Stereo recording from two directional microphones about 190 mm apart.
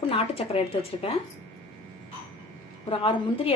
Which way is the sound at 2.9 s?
30° left (ahead or behind).